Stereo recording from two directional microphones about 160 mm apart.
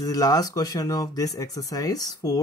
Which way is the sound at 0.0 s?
25° left (ahead or behind).